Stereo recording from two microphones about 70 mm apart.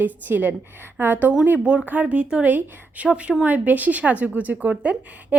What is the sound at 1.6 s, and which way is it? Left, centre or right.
A woman's voice, centre.